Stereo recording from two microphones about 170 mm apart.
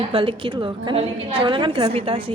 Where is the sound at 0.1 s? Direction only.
30° right (ahead or behind).